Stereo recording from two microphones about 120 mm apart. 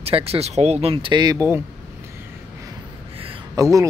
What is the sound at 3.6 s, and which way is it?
Speech, 30° right (ahead or behind).